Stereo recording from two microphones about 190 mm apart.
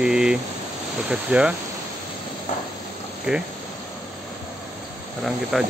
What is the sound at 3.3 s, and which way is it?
Speech, 5° right (ahead or behind).